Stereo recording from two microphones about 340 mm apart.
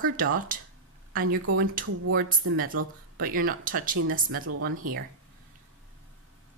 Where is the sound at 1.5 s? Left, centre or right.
Right.